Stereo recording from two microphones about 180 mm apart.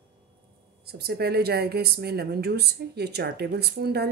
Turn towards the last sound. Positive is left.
turn(degrees=-65)  # may be behind; listen again after turning